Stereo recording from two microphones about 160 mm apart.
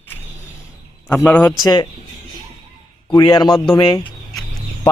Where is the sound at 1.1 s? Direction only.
10° left (ahead or behind).